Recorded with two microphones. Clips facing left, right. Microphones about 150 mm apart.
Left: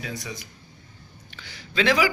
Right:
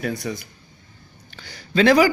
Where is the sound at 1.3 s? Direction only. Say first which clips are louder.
Right 7 dB; 40° right (ahead or behind).